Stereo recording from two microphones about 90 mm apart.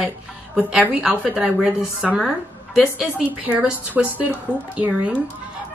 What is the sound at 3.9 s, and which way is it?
Speech, 20° right (ahead or behind).